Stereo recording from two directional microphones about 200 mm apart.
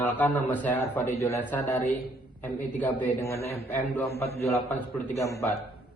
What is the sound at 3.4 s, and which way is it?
Speech, 30° left (ahead or behind).